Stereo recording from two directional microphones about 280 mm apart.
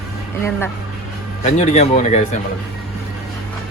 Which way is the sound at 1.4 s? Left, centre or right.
Left.